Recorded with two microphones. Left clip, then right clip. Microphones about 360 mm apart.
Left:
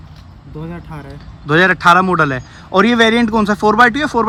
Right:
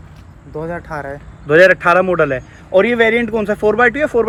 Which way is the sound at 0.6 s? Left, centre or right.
Right.